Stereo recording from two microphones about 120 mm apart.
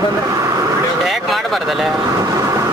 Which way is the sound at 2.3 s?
30° right (ahead or behind).